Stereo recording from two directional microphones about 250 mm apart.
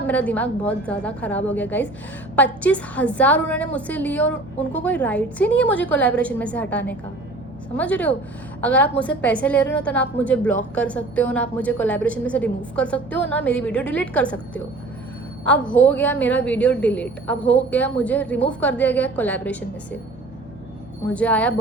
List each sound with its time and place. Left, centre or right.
0.1 s a woman's voice: centre
21.1 s a woman's voice: centre